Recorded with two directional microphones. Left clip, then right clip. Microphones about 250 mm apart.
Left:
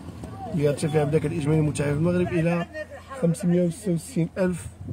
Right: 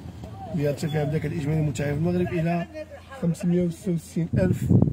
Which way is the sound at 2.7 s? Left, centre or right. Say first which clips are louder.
Left 2 dB; left.